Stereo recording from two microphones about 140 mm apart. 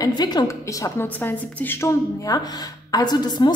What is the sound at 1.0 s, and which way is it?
A woman's voice, 10° left (ahead or behind).